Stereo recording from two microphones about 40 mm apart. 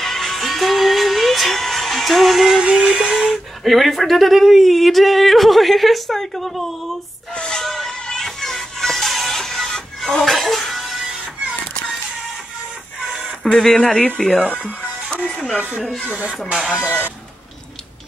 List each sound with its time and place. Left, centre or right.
0.0 s music: centre
2.8 s a sound: centre
3.6 s speech: centre
7.3 s music: centre
7.6 s music: centre
13.0 s music: centre
13.6 s speech: centre
16.5 s a sound: centre
16.8 s speech: right